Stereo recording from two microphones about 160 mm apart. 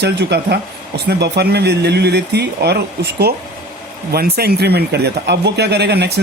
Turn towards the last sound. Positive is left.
turn(degrees=-90)